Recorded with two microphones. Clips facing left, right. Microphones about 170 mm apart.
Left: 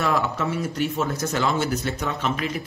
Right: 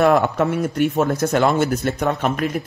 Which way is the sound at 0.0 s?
55° right (ahead or behind).